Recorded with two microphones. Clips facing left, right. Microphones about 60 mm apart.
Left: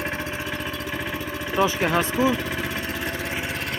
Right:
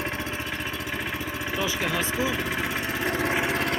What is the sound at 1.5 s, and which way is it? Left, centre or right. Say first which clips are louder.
Speech: left 7 dB; left.